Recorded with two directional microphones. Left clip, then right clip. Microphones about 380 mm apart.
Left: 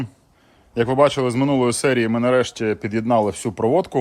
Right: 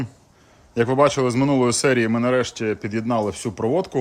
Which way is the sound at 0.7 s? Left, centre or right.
Centre.